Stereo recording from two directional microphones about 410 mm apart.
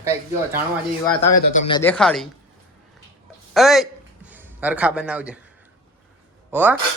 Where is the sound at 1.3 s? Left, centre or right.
Centre.